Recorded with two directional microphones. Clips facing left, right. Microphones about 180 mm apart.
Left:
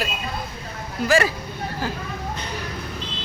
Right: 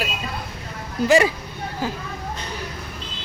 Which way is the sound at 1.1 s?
20° right (ahead or behind).